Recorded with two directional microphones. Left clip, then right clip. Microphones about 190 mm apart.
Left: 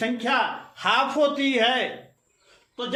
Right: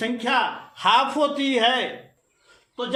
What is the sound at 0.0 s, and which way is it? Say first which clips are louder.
A man's voice: right 1 dB; 15° right (ahead or behind).